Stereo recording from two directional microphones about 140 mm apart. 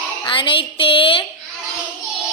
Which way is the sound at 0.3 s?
35° left (ahead or behind).